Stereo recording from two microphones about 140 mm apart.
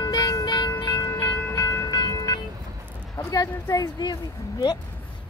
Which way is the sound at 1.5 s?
25° left (ahead or behind).